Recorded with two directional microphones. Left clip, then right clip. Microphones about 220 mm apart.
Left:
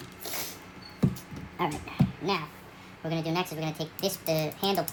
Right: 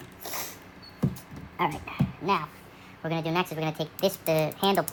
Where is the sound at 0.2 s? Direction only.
Centre (ahead or behind).